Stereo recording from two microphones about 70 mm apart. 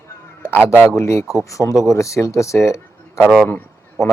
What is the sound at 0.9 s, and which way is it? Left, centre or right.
Speech, left.